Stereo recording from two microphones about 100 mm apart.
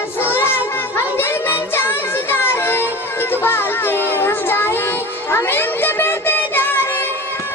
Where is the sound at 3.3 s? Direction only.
20° left (ahead or behind).